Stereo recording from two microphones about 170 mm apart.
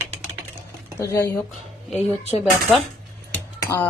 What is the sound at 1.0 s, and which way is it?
Speech, 15° left (ahead or behind).